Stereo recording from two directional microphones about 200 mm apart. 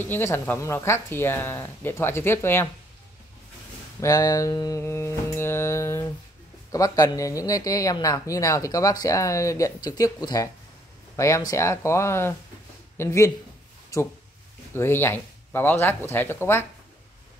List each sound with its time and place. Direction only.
0.0 s speech: 10° left (ahead or behind)
4.0 s speech: 15° left (ahead or behind)